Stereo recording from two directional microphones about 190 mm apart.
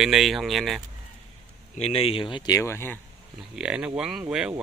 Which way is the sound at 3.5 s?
5° right (ahead or behind).